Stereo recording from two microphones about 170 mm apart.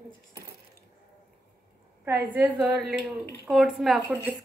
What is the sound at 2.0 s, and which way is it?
A woman's voice, 5° right (ahead or behind).